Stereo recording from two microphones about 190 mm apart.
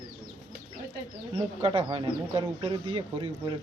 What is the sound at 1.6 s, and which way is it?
Speech, 30° right (ahead or behind).